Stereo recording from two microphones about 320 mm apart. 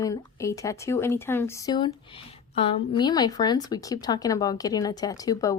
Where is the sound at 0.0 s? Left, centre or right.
Centre.